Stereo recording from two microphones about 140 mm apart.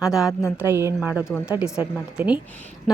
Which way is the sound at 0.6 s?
20° right (ahead or behind).